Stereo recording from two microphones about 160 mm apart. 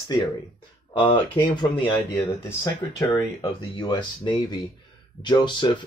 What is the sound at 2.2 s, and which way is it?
Speech, 20° left (ahead or behind).